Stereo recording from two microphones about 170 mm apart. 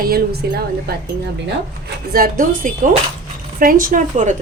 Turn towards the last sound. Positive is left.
turn(degrees=-50)  # may be behind; listen again after turning